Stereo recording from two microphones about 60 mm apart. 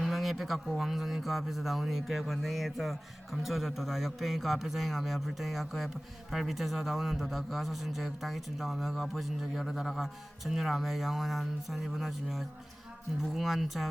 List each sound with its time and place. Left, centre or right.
0.0 s speech: centre